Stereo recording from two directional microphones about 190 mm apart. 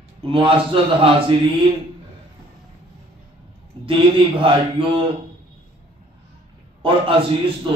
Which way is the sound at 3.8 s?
25° right (ahead or behind).